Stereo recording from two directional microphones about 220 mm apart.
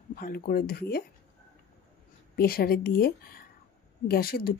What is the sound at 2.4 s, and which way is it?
Speech, 45° left (ahead or behind).